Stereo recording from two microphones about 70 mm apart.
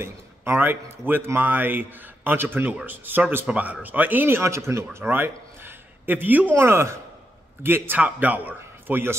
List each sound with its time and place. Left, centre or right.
0.0 s speech: right
4.9 s a sound: right
6.6 s speech: right